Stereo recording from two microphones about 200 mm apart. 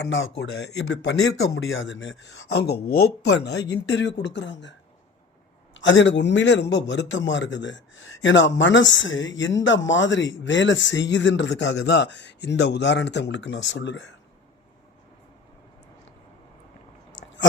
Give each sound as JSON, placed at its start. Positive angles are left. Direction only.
{"t": 0.0, "sound": "speech", "side_deg": 70}
{"t": 5.7, "sound": "speech", "side_deg": 65}
{"t": 17.1, "sound": "a sound", "side_deg": 70}